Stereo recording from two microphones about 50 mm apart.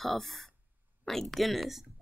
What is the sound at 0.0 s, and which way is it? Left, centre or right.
A woman's voice, centre.